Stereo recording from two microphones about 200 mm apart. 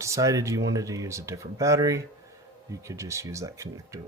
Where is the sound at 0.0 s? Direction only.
15° right (ahead or behind).